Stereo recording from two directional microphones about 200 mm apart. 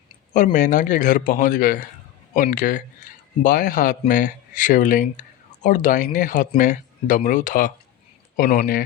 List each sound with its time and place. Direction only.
0.3 s a man's voice: 40° left (ahead or behind)